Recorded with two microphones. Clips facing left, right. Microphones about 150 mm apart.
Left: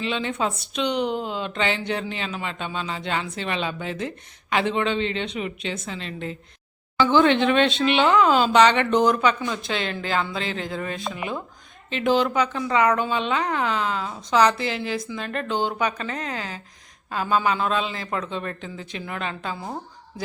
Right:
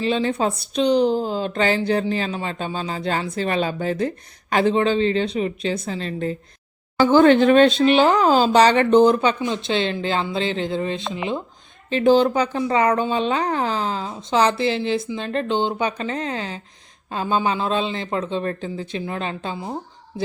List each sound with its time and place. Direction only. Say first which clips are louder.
0.0 s a woman's voice: right 5 dB; 35° right (ahead or behind)
11.9 s a woman's voice: right 6 dB; 35° right (ahead or behind)